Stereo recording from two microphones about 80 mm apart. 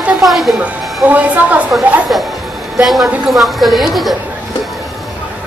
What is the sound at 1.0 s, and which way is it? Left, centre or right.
Speech, centre.